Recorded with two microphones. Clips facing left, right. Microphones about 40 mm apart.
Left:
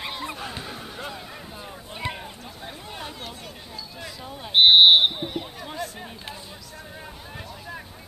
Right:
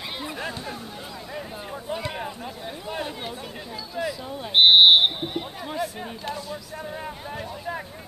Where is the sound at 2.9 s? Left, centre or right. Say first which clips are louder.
Right 7 dB; centre.